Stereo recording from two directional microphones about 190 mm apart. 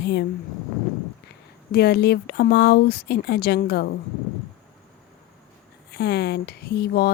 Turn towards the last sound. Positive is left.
turn(degrees=55)  # may be behind; listen again after turning